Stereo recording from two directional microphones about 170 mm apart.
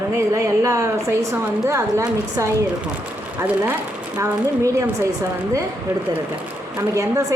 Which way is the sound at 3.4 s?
10° right (ahead or behind).